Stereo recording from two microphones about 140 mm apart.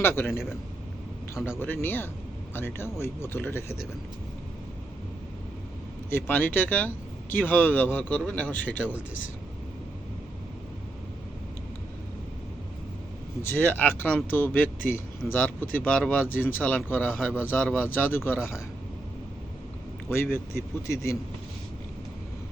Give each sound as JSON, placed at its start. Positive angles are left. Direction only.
{"t": 0.0, "sound": "speech", "side_deg": 15}
{"t": 1.5, "sound": "speech", "side_deg": 15}
{"t": 6.1, "sound": "speech", "side_deg": 15}
{"t": 13.4, "sound": "speech", "side_deg": 10}
{"t": 20.3, "sound": "speech", "side_deg": 20}